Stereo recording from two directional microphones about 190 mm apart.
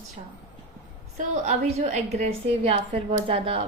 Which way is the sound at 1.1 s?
40° right (ahead or behind).